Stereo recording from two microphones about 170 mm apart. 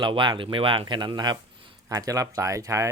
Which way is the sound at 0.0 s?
25° right (ahead or behind).